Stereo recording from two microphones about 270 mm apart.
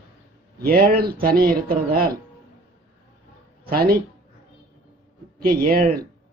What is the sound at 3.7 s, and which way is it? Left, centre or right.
Speech, right.